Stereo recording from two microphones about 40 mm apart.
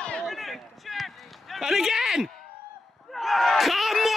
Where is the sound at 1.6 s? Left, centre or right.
Centre.